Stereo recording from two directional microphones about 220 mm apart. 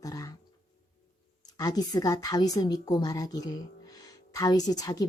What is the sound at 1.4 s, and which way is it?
Speech, 15° left (ahead or behind).